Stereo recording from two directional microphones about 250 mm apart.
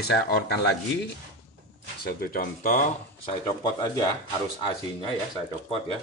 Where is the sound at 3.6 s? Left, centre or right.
Centre.